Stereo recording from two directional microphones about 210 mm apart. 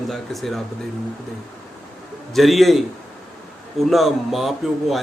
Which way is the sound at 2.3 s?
Centre (ahead or behind).